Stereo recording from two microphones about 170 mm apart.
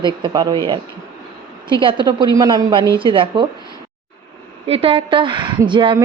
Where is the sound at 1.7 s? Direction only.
30° right (ahead or behind).